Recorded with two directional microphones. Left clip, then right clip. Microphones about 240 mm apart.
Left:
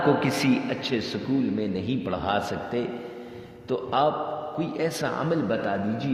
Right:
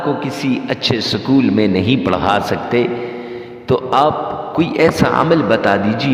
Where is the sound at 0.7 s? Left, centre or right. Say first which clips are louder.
Right 11 dB; right.